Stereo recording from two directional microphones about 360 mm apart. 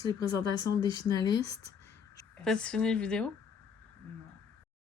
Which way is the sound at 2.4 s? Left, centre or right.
Centre.